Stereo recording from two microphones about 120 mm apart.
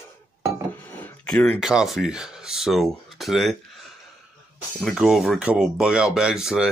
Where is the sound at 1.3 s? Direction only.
5° left (ahead or behind).